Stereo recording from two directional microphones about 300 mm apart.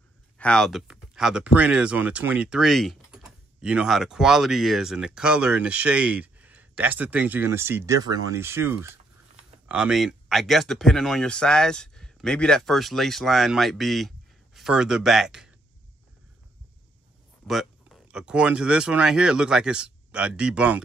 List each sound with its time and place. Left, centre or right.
0.4 s speech: centre
17.5 s speech: centre